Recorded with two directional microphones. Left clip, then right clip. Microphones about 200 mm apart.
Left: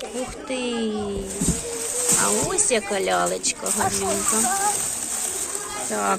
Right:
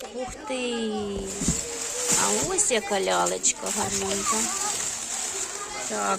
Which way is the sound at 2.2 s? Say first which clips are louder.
Left 2 dB; 15° right (ahead or behind).